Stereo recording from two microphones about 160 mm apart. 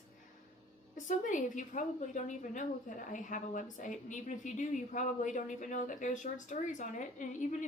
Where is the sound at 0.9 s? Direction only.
50° left (ahead or behind).